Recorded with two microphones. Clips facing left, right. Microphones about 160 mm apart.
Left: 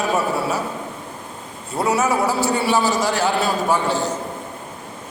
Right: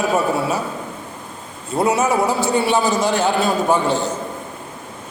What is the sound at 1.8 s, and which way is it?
A man's voice, 20° right (ahead or behind).